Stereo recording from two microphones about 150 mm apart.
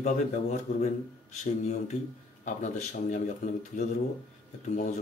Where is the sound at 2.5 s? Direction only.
55° left (ahead or behind).